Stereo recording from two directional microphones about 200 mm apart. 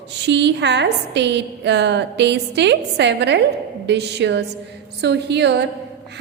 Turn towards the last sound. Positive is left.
turn(degrees=-55)  # may be behind; listen again after turning